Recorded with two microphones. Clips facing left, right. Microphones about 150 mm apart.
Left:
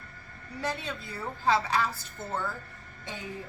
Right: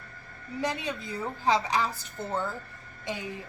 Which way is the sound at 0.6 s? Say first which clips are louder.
Right 3 dB; 15° right (ahead or behind).